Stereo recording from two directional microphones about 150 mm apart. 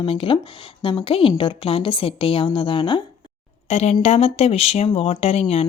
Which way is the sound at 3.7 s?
50° left (ahead or behind).